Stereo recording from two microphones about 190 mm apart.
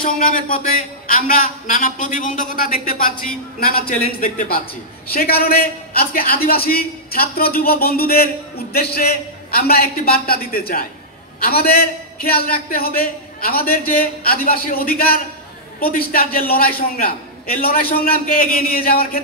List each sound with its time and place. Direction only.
0.0 s a man's voice: 45° left (ahead or behind)